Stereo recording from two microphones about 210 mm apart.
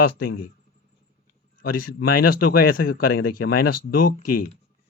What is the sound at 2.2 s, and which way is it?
Speech, 45° left (ahead or behind).